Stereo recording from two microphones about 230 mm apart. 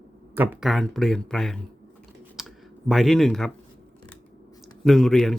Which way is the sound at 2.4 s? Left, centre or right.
Centre.